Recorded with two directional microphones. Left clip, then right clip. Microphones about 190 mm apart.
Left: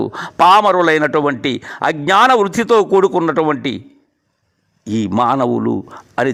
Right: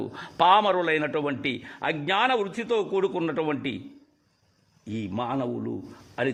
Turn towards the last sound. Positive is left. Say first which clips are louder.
# left 11 dB
turn(degrees=40)  # may be behind; listen again after turning